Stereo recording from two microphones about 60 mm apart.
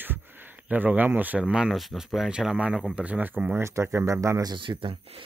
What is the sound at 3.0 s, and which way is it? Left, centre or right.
Speech, right.